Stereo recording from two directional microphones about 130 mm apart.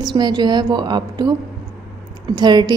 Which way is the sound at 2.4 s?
35° right (ahead or behind).